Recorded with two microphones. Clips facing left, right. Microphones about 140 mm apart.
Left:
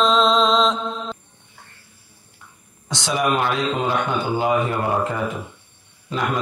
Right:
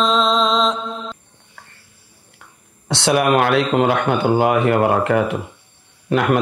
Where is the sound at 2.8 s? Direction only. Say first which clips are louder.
Right 5 dB; 65° right (ahead or behind).